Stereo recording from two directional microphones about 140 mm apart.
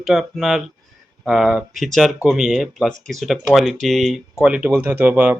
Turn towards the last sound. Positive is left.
turn(degrees=-15)  # may be behind; listen again after turning